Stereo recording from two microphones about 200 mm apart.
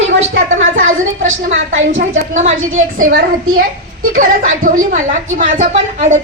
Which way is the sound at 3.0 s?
45° right (ahead or behind).